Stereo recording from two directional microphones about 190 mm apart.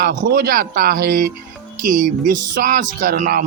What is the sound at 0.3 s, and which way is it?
Speech, 50° right (ahead or behind).